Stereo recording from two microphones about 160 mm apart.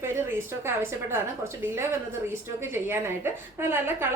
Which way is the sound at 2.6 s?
15° right (ahead or behind).